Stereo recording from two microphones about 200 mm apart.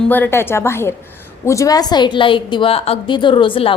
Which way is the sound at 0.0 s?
10° left (ahead or behind).